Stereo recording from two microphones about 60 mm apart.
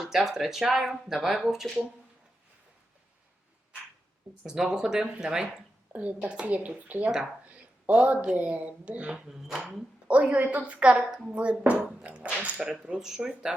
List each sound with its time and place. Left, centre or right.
0.0 s speech: centre
4.4 s speech: centre
5.9 s a woman's voice: right
7.5 s a sound: right
8.4 s a woman's voice: right
9.1 s speech: centre
10.1 s a woman's voice: right